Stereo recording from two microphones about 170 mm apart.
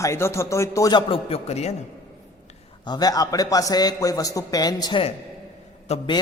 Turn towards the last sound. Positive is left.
turn(degrees=35)  # may be behind; listen again after turning